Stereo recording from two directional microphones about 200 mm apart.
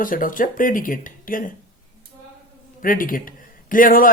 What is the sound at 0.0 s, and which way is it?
Speech, 45° left (ahead or behind).